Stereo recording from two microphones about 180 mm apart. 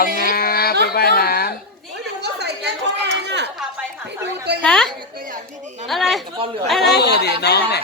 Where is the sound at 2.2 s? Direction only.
70° right (ahead or behind).